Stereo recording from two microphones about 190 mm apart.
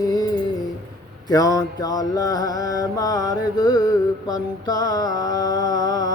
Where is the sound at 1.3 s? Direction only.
20° left (ahead or behind).